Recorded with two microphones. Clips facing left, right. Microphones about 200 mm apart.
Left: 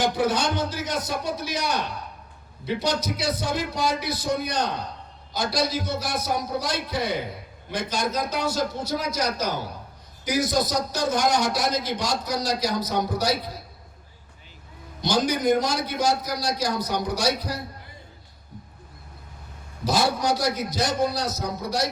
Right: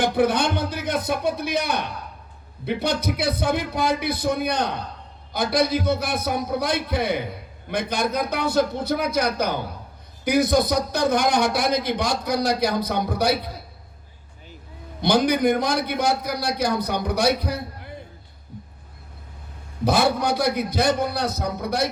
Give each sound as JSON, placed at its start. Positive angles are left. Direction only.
{"t": 0.0, "sound": "a man's voice", "side_deg": -60}
{"t": 15.0, "sound": "a man's voice", "side_deg": -60}
{"t": 19.8, "sound": "a man's voice", "side_deg": -60}